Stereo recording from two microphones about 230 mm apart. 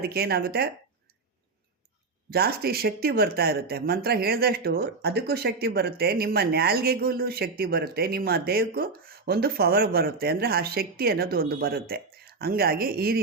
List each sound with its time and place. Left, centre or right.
0.0 s speech: right
2.3 s speech: right